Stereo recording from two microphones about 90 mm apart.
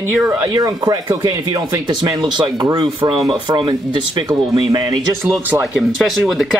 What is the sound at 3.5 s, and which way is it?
Speech, 65° right (ahead or behind).